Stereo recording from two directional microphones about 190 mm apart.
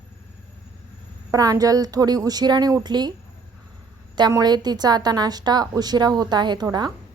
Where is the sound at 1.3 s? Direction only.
20° right (ahead or behind).